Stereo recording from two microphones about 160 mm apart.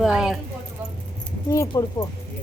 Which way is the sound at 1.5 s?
15° left (ahead or behind).